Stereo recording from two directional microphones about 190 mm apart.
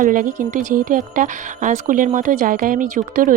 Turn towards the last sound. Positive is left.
turn(degrees=-45)  # may be behind; listen again after turning